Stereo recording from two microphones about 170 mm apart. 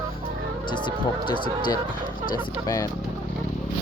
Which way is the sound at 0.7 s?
30° left (ahead or behind).